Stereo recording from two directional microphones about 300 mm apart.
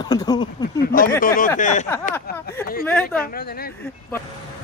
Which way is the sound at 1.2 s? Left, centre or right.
Left.